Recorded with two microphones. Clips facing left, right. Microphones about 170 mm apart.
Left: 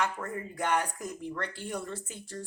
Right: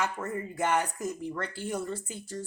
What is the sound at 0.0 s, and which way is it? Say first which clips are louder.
Speech: right 1 dB; 5° right (ahead or behind).